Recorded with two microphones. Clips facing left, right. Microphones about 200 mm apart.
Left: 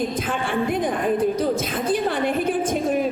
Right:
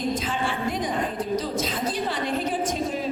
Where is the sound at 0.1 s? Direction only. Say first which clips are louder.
Left 2 dB; 55° left (ahead or behind).